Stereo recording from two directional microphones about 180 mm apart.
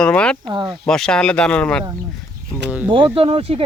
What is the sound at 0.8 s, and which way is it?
Speech, 5° left (ahead or behind).